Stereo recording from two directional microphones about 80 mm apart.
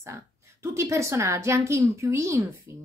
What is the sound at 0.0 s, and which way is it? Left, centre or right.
A woman's voice, right.